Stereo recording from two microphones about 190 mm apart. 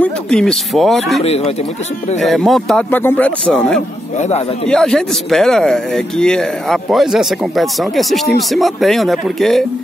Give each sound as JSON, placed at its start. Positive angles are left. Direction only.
{"t": 0.0, "sound": "speech", "side_deg": 5}
{"t": 1.2, "sound": "speech", "side_deg": 35}
{"t": 2.1, "sound": "speech", "side_deg": 0}